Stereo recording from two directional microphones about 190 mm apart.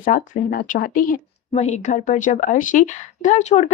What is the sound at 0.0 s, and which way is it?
Speech, 45° left (ahead or behind).